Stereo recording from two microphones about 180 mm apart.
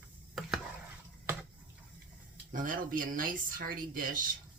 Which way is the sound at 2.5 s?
50° right (ahead or behind).